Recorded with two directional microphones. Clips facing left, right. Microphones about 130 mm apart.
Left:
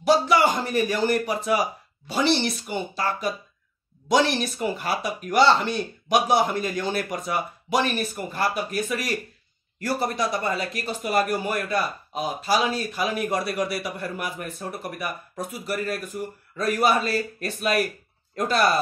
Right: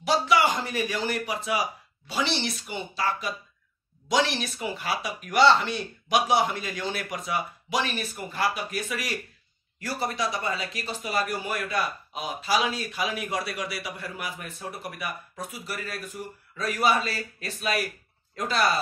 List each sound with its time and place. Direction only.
0.0 s speech: 45° left (ahead or behind)